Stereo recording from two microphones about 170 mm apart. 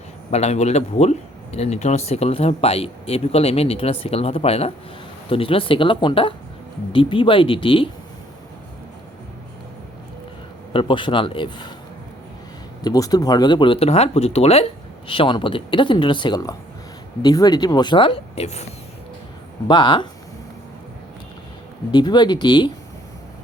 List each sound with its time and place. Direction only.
0.3 s speech: 40° left (ahead or behind)
10.7 s speech: 30° left (ahead or behind)
12.8 s speech: 20° left (ahead or behind); by 18.6 s 40° left (ahead or behind)
19.6 s speech: 25° left (ahead or behind)
21.9 s speech: 25° left (ahead or behind)